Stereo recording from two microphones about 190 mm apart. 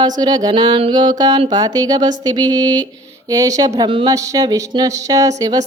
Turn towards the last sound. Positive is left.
turn(degrees=-20)  # may be behind; listen again after turning